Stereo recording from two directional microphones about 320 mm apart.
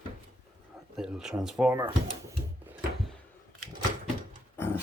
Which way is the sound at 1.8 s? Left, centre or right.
Centre.